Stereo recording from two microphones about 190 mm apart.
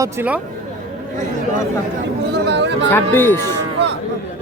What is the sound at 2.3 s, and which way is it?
Speech, 60° right (ahead or behind).